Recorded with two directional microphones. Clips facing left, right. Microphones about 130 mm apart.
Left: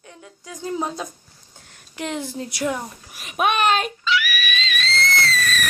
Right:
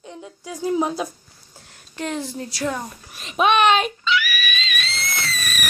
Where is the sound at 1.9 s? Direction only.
15° left (ahead or behind).